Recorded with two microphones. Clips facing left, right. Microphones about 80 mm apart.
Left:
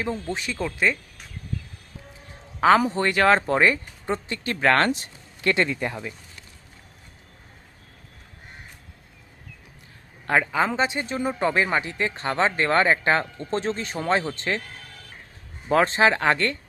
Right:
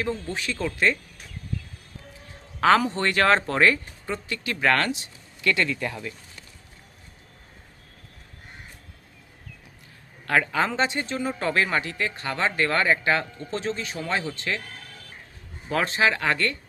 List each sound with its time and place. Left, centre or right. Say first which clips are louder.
0.0 s speech: left 1 dB; centre
0.5 s speech: right 1 dB; centre
2.6 s speech: left 2 dB; centre; by 5.1 s left
5.4 s speech: left 2 dB; left
10.2 s a woman's voice: left 1 dB; left
10.5 s speech: left 1 dB; centre; by 14.6 s left
15.7 s speech: left 4 dB; left